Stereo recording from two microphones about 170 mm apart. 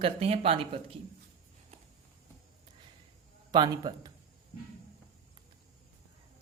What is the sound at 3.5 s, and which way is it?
Speech, 25° right (ahead or behind).